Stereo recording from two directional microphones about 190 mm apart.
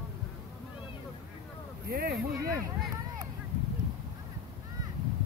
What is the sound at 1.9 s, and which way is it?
Speech, 50° right (ahead or behind).